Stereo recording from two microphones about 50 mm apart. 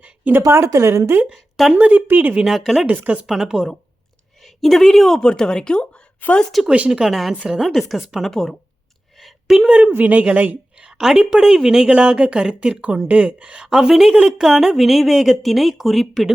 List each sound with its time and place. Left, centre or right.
0.4 s speech: right
1.7 s speech: right
2.5 s a woman's voice: centre
4.4 s a woman's voice: centre
6.2 s speech: left
6.7 s speech: right
7.0 s a woman's voice: centre
9.1 s a sound: centre
9.6 s speech: right
10.9 s a woman's voice: centre
13.7 s a woman's voice: centre